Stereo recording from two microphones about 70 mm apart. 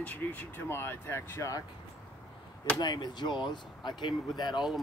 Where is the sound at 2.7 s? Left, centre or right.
Left.